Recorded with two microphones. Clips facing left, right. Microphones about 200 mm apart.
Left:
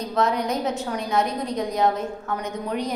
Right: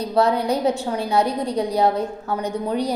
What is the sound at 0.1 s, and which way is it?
A woman's voice, 30° right (ahead or behind).